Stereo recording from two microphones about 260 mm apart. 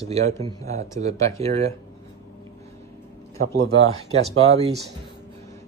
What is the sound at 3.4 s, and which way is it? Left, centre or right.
Speech, right.